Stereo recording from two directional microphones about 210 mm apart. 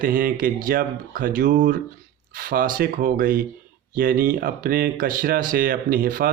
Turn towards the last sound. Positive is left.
turn(degrees=-45)  # may be behind; listen again after turning